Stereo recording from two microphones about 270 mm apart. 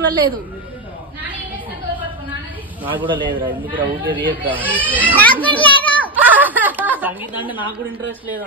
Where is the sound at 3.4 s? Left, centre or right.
Centre.